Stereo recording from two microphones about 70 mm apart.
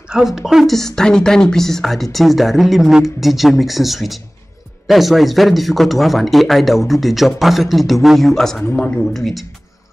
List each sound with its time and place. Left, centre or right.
0.1 s a woman's voice: centre
9.2 s a woman's voice: centre